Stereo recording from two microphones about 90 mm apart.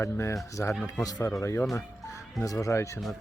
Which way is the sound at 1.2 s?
30° left (ahead or behind).